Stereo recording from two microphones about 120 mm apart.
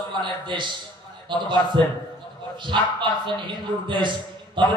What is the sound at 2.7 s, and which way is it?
Speech, 45° right (ahead or behind).